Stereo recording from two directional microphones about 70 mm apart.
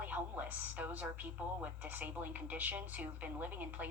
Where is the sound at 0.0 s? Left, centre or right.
Right.